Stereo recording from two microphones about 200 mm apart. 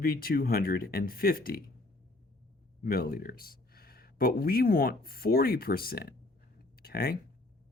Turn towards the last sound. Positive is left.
turn(degrees=50)  # may be behind; listen again after turning